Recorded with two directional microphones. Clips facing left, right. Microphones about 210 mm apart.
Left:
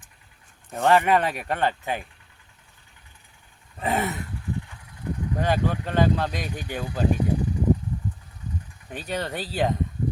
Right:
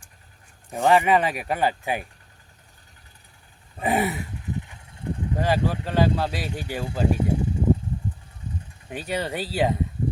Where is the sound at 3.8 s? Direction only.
15° right (ahead or behind).